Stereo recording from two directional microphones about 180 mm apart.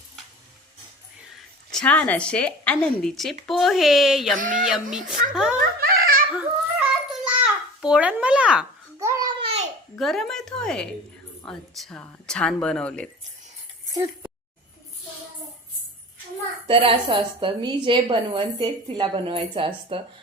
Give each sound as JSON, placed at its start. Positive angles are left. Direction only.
{"t": 1.7, "sound": "a woman's voice", "side_deg": 5}
{"t": 4.4, "sound": "speech", "side_deg": -45}
{"t": 4.7, "sound": "speech", "side_deg": -5}
{"t": 5.5, "sound": "giggle", "side_deg": -55}
{"t": 6.3, "sound": "babbling", "side_deg": -5}
{"t": 9.4, "sound": "babbling", "side_deg": -35}
{"t": 10.0, "sound": "speech", "side_deg": 0}
{"t": 13.9, "sound": "speech", "side_deg": -15}
{"t": 16.6, "sound": "a woman's voice", "side_deg": -30}